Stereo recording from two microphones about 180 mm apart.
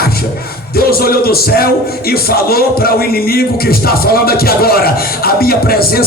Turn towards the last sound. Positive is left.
turn(degrees=55)  # may be behind; listen again after turning